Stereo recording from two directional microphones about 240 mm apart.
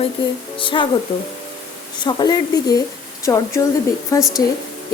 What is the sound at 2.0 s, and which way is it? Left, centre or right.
A woman's voice, centre.